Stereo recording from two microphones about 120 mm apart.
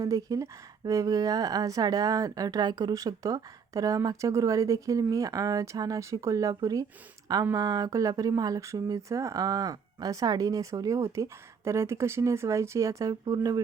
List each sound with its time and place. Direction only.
0.0 s a woman's voice: 30° right (ahead or behind)